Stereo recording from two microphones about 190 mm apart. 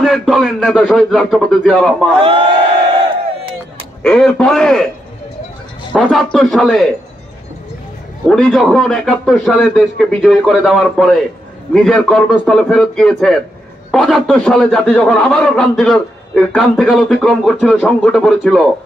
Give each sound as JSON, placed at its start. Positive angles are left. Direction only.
{"t": 0.0, "sound": "a man's voice", "side_deg": 0}
{"t": 2.2, "sound": "speech", "side_deg": -30}
{"t": 4.0, "sound": "a man's voice", "side_deg": 5}
{"t": 5.9, "sound": "a man's voice", "side_deg": 0}
{"t": 8.3, "sound": "a man's voice", "side_deg": 0}